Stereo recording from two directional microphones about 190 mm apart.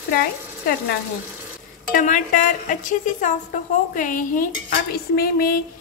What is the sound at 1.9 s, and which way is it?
A woman's voice, 45° left (ahead or behind).